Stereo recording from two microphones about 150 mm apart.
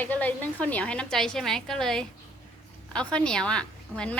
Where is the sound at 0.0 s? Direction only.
10° left (ahead or behind).